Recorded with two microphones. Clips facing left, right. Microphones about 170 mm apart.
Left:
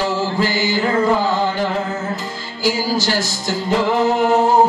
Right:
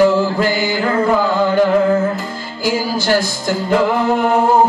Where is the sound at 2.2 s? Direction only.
55° right (ahead or behind).